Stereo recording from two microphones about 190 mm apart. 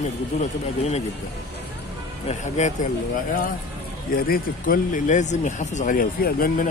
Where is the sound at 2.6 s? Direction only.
40° left (ahead or behind).